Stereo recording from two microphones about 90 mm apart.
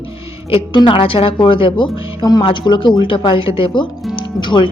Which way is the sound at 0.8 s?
70° left (ahead or behind).